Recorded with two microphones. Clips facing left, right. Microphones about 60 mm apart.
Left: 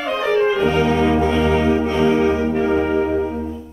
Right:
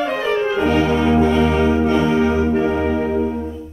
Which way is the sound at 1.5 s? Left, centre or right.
Left.